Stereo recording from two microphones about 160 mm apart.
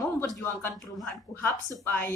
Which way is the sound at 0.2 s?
15° left (ahead or behind).